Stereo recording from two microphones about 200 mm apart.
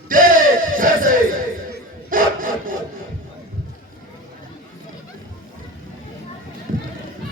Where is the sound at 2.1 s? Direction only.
45° right (ahead or behind).